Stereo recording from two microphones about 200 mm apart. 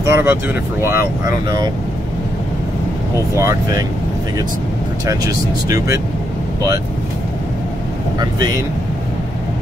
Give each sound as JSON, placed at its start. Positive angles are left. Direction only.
{"t": 0.0, "sound": "speech", "side_deg": -15}
{"t": 3.3, "sound": "speech", "side_deg": -15}
{"t": 5.0, "sound": "speech", "side_deg": -15}
{"t": 8.2, "sound": "speech", "side_deg": -20}